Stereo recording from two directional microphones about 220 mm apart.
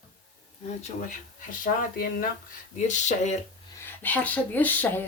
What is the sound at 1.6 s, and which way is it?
Speech, 40° left (ahead or behind).